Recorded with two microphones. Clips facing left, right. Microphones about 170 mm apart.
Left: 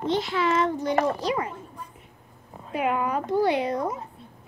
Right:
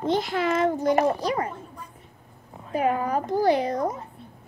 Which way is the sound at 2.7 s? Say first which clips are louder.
Right 2 dB; 40° right (ahead or behind).